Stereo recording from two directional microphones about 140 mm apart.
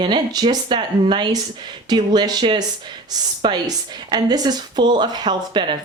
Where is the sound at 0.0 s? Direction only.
30° right (ahead or behind).